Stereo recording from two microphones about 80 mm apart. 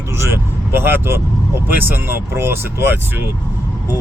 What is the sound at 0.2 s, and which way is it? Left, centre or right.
Speech, right.